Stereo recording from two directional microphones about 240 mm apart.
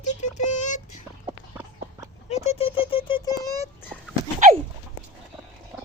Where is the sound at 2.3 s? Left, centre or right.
Left.